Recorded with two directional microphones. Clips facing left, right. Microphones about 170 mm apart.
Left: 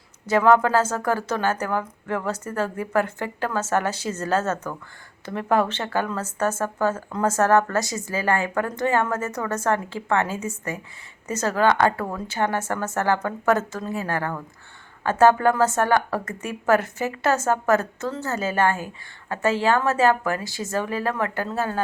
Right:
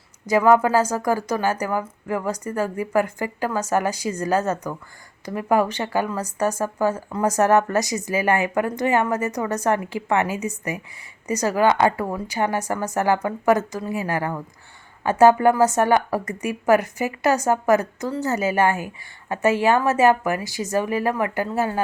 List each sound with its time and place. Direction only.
0.3 s speech: 10° right (ahead or behind)